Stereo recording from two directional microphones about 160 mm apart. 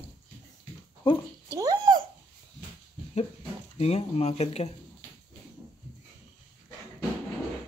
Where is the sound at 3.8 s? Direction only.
40° left (ahead or behind).